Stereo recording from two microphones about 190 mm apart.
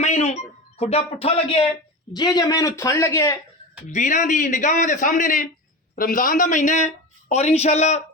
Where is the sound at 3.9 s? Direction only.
40° left (ahead or behind).